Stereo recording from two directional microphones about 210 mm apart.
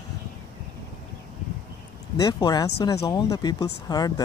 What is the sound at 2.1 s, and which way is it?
Speech, 20° left (ahead or behind).